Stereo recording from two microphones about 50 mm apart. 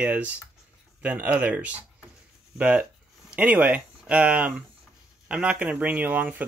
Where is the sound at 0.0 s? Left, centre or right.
Right.